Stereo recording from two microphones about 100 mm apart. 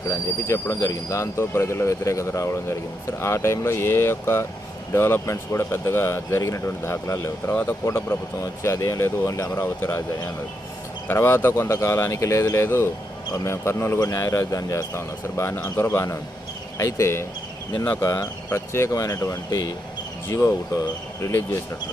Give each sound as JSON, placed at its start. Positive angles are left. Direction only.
{"t": 0.1, "sound": "speech", "side_deg": 30}
{"t": 11.1, "sound": "speech", "side_deg": 20}